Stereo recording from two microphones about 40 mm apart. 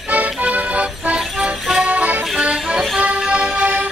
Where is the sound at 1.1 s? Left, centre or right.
Centre.